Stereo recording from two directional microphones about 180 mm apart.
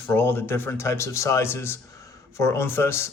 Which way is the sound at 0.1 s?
10° left (ahead or behind).